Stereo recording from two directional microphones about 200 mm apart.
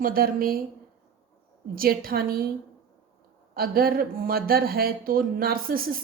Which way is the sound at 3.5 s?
50° right (ahead or behind).